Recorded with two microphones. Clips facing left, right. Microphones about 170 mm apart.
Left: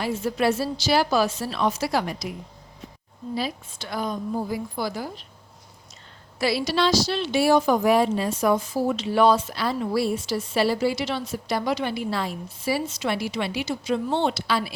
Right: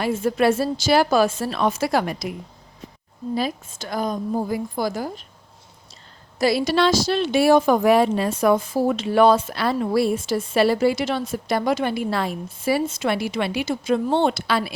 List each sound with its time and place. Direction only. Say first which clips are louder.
0.0 s speech: right 4 dB; 55° right (ahead or behind)
3.3 s speech: right 4 dB; 45° right (ahead or behind)
6.4 s speech: right 4 dB; 45° right (ahead or behind)